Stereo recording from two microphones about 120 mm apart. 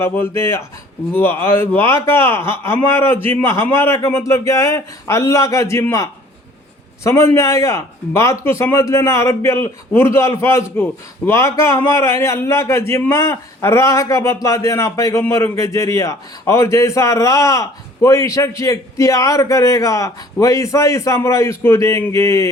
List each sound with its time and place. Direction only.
0.0 s a man's voice: 20° left (ahead or behind)